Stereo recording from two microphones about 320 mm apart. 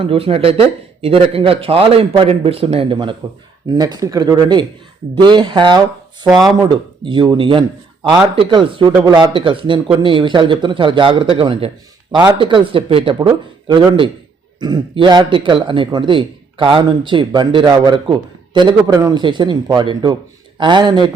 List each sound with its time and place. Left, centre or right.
0.0 s a man's voice: centre